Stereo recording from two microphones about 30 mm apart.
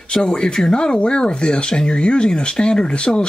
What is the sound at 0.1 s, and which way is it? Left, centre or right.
Speech, left.